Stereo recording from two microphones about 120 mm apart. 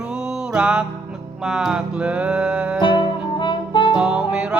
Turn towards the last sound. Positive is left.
turn(degrees=-10)  # may be behind; listen again after turning